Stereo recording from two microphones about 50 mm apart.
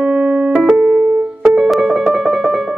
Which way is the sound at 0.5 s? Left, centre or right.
Centre.